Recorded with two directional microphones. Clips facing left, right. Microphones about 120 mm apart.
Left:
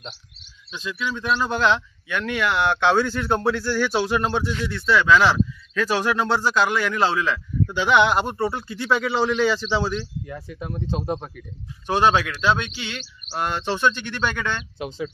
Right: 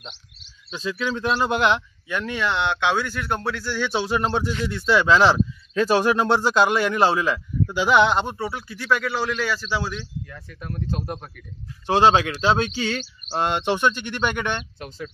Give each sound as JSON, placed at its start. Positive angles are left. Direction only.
{"t": 0.7, "sound": "speech", "side_deg": -35}
{"t": 1.4, "sound": "speech", "side_deg": -20}
{"t": 2.0, "sound": "speech", "side_deg": 0}
{"t": 3.9, "sound": "speech", "side_deg": -25}
{"t": 4.8, "sound": "speech", "side_deg": -25}
{"t": 9.2, "sound": "speech", "side_deg": 5}
{"t": 10.2, "sound": "speech", "side_deg": 20}
{"t": 10.9, "sound": "speech", "side_deg": 0}
{"t": 11.8, "sound": "speech", "side_deg": -30}
{"t": 13.4, "sound": "speech", "side_deg": -20}
{"t": 14.8, "sound": "speech", "side_deg": 0}